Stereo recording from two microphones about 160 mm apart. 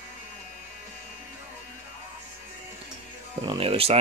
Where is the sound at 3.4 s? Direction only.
35° right (ahead or behind).